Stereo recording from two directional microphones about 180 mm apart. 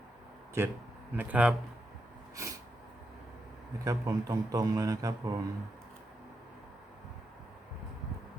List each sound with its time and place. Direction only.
0.6 s speech: 15° right (ahead or behind)
3.8 s speech: 20° right (ahead or behind)